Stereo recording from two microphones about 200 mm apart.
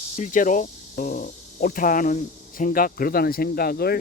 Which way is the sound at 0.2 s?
40° left (ahead or behind).